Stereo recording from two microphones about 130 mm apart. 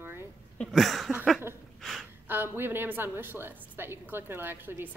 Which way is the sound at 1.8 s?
Centre (ahead or behind).